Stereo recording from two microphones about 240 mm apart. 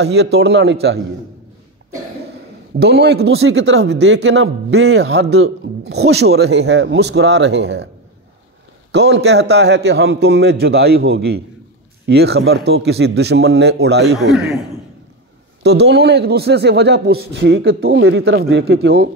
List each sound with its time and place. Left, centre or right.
0.0 s speech: right
2.8 s speech: right
8.9 s speech: right
15.6 s speech: right
17.7 s speech: right
18.0 s speech: right